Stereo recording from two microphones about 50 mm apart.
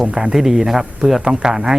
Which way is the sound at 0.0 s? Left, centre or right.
Centre.